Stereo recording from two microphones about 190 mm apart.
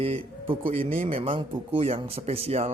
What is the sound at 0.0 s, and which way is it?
A man's voice, 30° right (ahead or behind).